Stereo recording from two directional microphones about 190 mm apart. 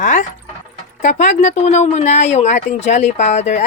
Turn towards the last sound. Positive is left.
turn(degrees=35)  # may be behind; listen again after turning